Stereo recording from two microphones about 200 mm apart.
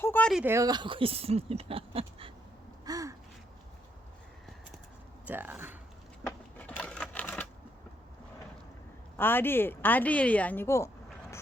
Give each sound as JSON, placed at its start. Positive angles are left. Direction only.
{"t": 0.0, "sound": "a sound", "side_deg": 10}
{"t": 0.4, "sound": "speech", "side_deg": -15}
{"t": 2.8, "sound": "gasp", "side_deg": -15}
{"t": 5.2, "sound": "speech", "side_deg": -10}
{"t": 6.2, "sound": "typewriter", "side_deg": 10}
{"t": 9.1, "sound": "a woman's voice", "side_deg": 10}